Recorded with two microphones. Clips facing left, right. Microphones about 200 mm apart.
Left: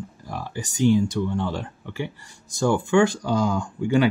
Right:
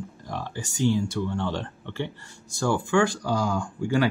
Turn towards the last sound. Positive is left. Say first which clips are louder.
# left 3 dB
turn(degrees=20)  # may be behind; listen again after turning